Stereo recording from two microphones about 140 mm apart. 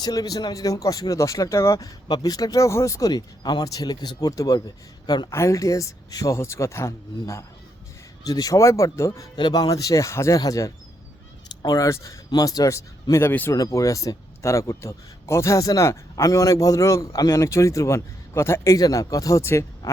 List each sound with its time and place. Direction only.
0.0 s speech: 25° left (ahead or behind)